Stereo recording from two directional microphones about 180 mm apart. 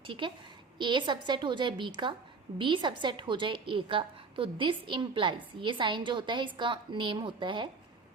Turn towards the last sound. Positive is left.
turn(degrees=-25)  # may be behind; listen again after turning